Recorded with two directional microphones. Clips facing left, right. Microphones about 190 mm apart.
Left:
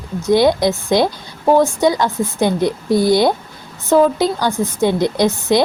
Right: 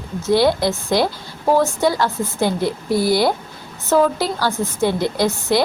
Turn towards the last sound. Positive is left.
turn(degrees=20)  # may be behind; listen again after turning